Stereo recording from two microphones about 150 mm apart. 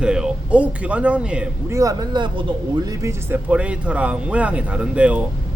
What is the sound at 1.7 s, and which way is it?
Speech, 20° right (ahead or behind).